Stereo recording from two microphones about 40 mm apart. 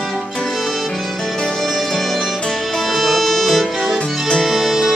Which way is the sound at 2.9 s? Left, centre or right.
Centre.